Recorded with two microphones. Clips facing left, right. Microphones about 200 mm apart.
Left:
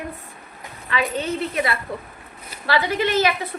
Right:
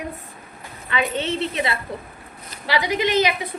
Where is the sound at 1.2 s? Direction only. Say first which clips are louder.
Even; 25° right (ahead or behind).